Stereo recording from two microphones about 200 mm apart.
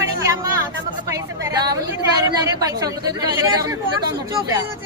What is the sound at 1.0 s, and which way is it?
Speech, 15° right (ahead or behind).